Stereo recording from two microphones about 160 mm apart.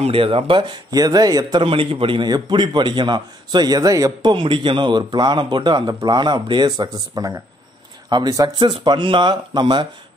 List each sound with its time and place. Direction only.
0.0 s speech: 35° right (ahead or behind)